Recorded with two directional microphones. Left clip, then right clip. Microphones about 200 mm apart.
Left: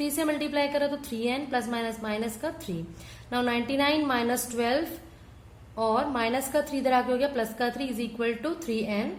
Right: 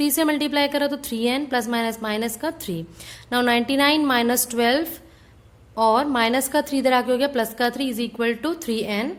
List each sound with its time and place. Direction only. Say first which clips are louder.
0.0 s a woman's voice: right 7 dB; 40° right (ahead or behind)